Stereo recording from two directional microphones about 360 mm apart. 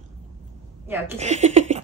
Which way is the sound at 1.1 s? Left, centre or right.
Centre.